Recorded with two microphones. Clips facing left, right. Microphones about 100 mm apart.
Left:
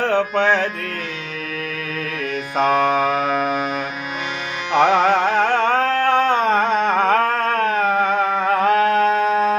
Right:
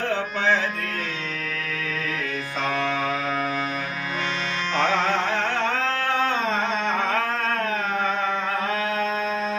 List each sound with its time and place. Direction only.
0.1 s music: 55° left (ahead or behind)
2.6 s mantra: 65° left (ahead or behind)
4.8 s music: 55° left (ahead or behind)